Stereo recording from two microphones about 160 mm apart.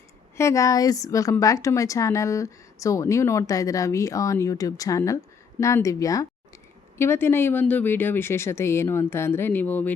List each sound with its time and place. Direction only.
0.3 s a woman's voice: 20° left (ahead or behind)